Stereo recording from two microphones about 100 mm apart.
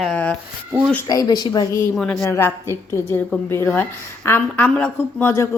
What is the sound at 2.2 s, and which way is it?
A woman's voice, 25° left (ahead or behind).